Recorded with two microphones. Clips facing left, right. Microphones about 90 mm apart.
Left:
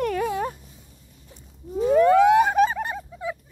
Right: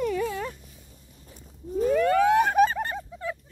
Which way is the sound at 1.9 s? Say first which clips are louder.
Left 5 dB; 20° left (ahead or behind).